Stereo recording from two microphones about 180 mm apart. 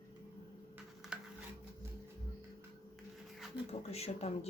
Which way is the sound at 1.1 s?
5° right (ahead or behind).